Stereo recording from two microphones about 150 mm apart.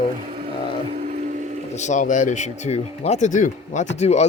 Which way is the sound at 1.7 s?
55° left (ahead or behind).